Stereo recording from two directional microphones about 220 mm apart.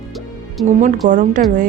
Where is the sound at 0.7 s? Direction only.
35° right (ahead or behind).